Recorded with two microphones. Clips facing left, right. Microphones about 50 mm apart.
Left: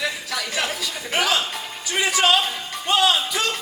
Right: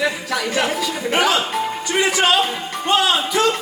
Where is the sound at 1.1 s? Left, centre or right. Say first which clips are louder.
Right 4 dB; centre.